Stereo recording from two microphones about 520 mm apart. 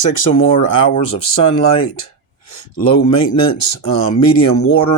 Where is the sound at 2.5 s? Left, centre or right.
Left.